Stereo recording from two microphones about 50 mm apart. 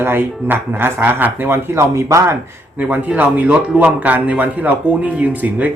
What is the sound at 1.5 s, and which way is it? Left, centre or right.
Speech, right.